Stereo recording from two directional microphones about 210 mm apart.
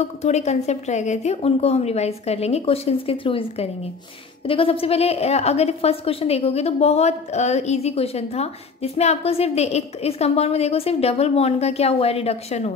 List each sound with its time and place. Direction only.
0.2 s a woman's voice: 30° left (ahead or behind)